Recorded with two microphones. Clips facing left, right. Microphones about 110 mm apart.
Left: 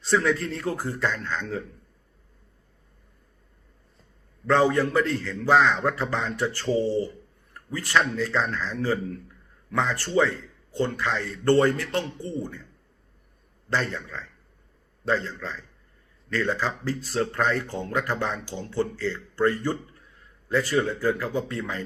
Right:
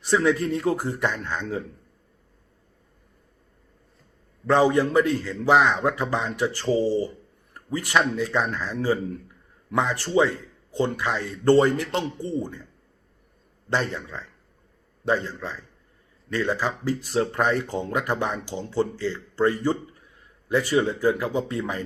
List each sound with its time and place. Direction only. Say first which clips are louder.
0.0 s speech: right 2 dB; 15° right (ahead or behind)
4.4 s speech: right 2 dB; 15° right (ahead or behind)
13.7 s speech: right 2 dB; 15° right (ahead or behind)